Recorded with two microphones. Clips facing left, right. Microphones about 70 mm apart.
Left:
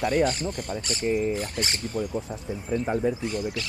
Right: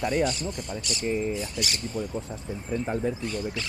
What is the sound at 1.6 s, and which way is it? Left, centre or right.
Speech, left.